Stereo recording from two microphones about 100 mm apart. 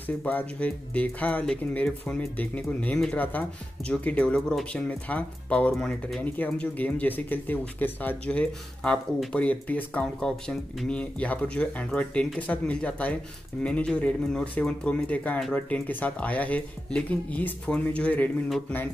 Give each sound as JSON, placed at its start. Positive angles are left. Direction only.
{"t": 0.0, "sound": "speech", "side_deg": 15}
{"t": 6.2, "sound": "speech", "side_deg": 15}